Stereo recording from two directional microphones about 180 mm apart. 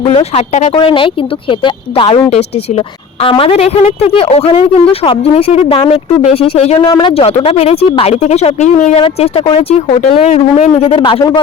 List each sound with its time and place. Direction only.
0.0 s speech: 35° left (ahead or behind)
3.2 s speech: 30° left (ahead or behind)